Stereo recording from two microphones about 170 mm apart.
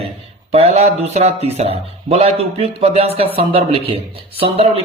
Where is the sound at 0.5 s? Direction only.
40° right (ahead or behind).